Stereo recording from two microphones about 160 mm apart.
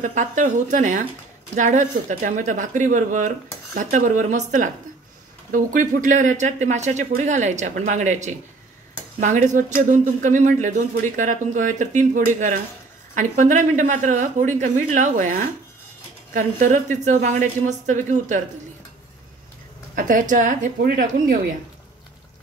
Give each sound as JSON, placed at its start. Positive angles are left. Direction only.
{"t": 0.0, "sound": "speech", "side_deg": -50}
{"t": 20.0, "sound": "a woman's voice", "side_deg": -55}